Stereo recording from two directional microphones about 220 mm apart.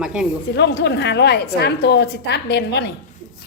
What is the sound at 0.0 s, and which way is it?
Speech, 5° right (ahead or behind).